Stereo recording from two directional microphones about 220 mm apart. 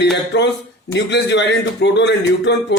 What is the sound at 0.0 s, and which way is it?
Speech, 50° left (ahead or behind).